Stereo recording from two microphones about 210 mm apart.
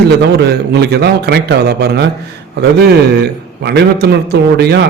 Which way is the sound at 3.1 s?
50° right (ahead or behind).